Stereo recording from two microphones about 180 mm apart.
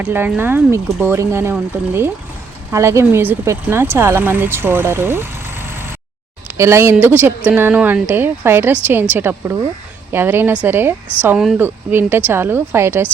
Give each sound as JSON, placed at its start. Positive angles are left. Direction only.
{"t": 0.0, "sound": "speech", "side_deg": -10}